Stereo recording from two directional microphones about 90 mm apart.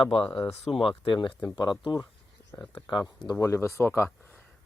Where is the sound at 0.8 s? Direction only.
75° left (ahead or behind); by 3.0 s 55° left (ahead or behind).